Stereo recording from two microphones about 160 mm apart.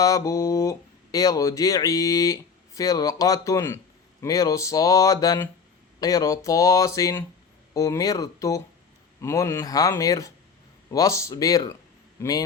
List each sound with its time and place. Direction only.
0.0 s speech: 20° left (ahead or behind)